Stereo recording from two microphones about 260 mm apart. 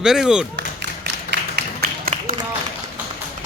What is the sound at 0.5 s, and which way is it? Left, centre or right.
Tap, right.